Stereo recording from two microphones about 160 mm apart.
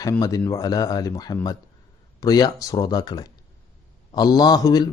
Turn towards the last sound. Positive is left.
turn(degrees=25)  # may be behind; listen again after turning